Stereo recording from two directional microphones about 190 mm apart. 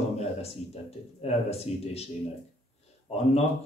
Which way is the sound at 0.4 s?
30° left (ahead or behind).